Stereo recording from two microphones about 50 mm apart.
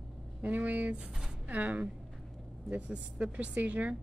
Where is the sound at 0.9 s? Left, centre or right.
Centre.